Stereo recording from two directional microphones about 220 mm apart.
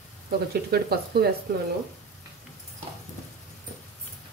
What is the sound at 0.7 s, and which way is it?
Speech, 45° right (ahead or behind).